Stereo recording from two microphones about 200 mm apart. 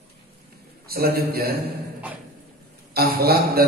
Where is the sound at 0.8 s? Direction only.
50° right (ahead or behind).